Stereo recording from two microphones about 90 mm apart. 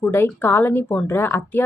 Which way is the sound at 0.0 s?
25° left (ahead or behind).